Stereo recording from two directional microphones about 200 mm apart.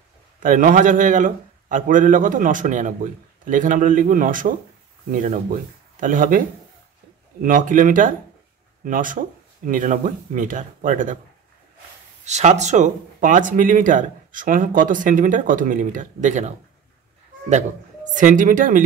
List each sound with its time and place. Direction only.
0.4 s speech: 40° right (ahead or behind)
7.4 s speech: 40° right (ahead or behind)
12.3 s speech: 35° right (ahead or behind)
18.1 s speech: 40° right (ahead or behind)